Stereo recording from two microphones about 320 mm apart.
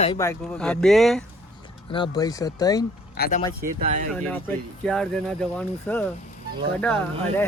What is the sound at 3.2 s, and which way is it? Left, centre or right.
Speech, left.